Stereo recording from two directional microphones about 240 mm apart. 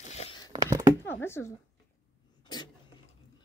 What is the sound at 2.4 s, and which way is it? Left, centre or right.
Cough, centre.